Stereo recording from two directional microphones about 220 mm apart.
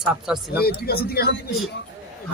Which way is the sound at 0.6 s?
45° left (ahead or behind).